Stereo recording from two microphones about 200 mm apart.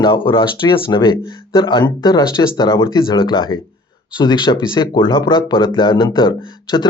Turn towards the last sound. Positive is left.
turn(degrees=20)  # may be behind; listen again after turning